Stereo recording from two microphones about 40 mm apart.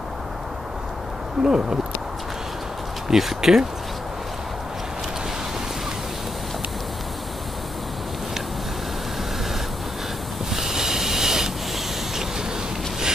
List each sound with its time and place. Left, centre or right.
1.4 s speech: centre
3.1 s speech: centre
10.5 s a sound: centre